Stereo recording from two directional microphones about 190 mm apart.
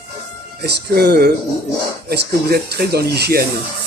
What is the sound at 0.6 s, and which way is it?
Speech, 55° right (ahead or behind).